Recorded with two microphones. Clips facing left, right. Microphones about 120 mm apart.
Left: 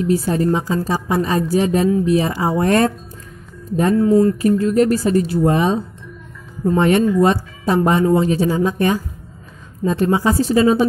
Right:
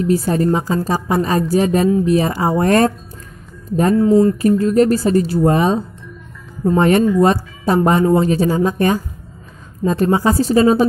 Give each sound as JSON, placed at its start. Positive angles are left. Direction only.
{"t": 0.1, "sound": "a woman's voice", "side_deg": -45}
{"t": 4.0, "sound": "speech", "side_deg": -25}
{"t": 4.4, "sound": "speech", "side_deg": -40}
{"t": 6.8, "sound": "a woman's voice", "side_deg": -40}